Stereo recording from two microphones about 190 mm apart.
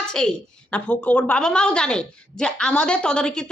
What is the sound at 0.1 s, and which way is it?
Speech, 5° left (ahead or behind).